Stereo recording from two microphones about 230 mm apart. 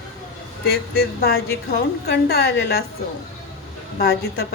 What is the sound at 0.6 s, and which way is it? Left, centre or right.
A woman's voice, left.